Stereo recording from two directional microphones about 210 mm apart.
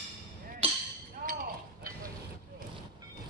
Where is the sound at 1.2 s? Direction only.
45° right (ahead or behind).